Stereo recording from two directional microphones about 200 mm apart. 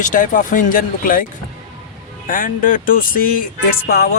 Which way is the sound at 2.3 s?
45° left (ahead or behind).